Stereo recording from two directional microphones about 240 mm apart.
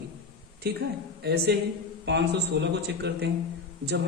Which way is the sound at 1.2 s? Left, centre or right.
Right.